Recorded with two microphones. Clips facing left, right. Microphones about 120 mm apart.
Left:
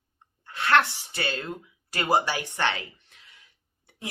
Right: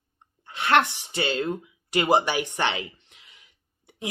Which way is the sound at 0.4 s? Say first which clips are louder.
Right 1 dB; 20° right (ahead or behind).